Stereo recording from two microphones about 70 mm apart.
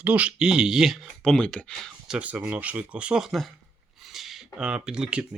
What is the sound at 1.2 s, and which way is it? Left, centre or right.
Speech, centre.